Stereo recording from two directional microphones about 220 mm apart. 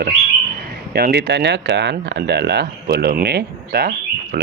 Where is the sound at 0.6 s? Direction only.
45° right (ahead or behind).